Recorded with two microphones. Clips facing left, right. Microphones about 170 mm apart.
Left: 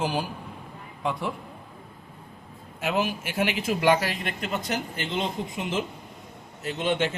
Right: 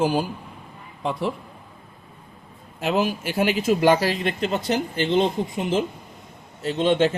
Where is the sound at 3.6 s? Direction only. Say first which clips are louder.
Right 4 dB; 30° right (ahead or behind).